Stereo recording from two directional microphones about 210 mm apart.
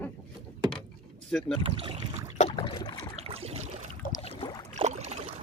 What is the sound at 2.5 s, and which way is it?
Boat, 20° left (ahead or behind).